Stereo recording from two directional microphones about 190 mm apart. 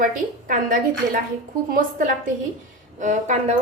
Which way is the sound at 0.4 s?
45° right (ahead or behind).